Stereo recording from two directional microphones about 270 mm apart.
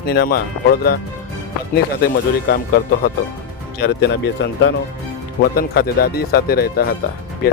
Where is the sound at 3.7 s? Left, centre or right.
Left.